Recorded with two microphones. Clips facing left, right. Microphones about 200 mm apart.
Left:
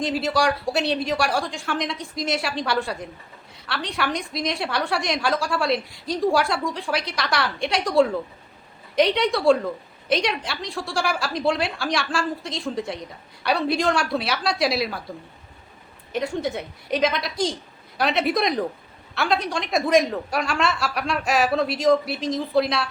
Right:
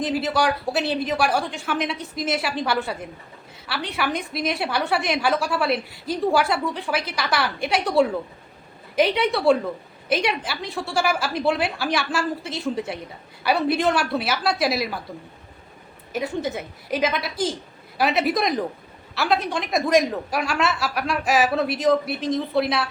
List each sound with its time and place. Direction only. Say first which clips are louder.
0.0 s a woman's voice: even; centre (ahead or behind)
16.1 s a woman's voice: left 1 dB; 5° right (ahead or behind)